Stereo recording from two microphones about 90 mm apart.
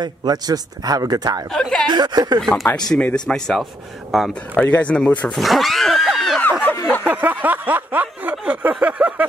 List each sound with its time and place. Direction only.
0.0 s speech: 50° right (ahead or behind)
1.5 s speech: 5° left (ahead or behind)
1.9 s speech: 50° right (ahead or behind)
2.9 s speech: 15° left (ahead or behind)
4.6 s speech: 15° left (ahead or behind)
5.3 s speech: centre (ahead or behind)
6.1 s a sound: centre (ahead or behind)
6.6 s a sound: 20° left (ahead or behind)
7.1 s a sound: 20° right (ahead or behind)